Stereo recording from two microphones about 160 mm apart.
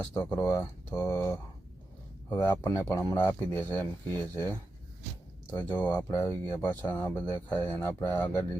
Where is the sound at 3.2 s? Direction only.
10° left (ahead or behind).